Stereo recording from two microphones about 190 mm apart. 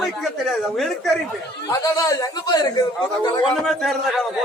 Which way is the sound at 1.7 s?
20° left (ahead or behind).